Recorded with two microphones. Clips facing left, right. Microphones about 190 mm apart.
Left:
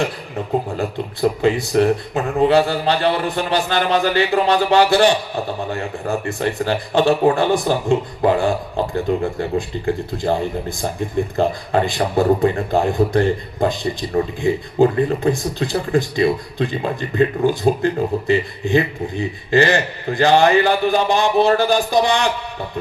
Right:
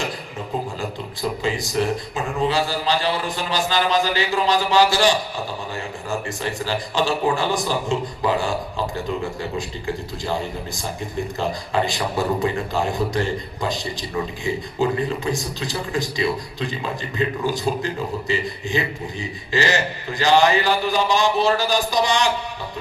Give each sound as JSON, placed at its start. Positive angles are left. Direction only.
{"t": 0.0, "sound": "speech", "side_deg": 60}
{"t": 11.3, "sound": "speech", "side_deg": 55}